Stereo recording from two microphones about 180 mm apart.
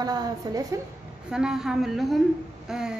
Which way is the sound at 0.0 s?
20° right (ahead or behind).